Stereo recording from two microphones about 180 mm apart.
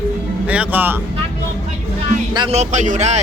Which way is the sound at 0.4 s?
10° right (ahead or behind).